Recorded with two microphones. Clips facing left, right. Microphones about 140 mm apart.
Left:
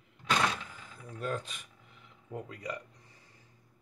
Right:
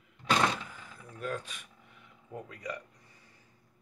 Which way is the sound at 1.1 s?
30° left (ahead or behind).